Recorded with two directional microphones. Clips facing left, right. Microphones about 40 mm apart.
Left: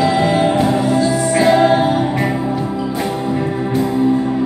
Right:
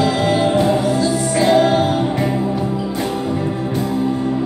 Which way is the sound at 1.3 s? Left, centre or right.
Left.